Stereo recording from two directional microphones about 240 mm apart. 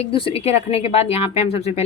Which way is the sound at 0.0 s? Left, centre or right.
Left.